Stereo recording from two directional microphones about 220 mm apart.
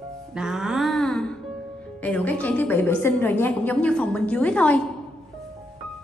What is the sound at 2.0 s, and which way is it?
A woman's voice, 5° left (ahead or behind).